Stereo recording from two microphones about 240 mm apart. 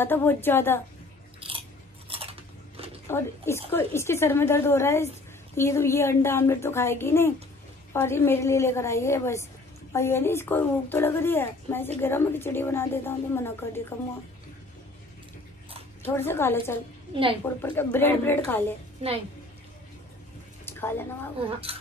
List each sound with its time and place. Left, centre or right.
0.0 s a woman's voice: centre
1.4 s chewing: right
2.0 s a sound: right
3.1 s a woman's voice: centre
16.0 s a woman's voice: centre
17.1 s speech: right
17.6 s a woman's voice: centre
20.6 s a sound: centre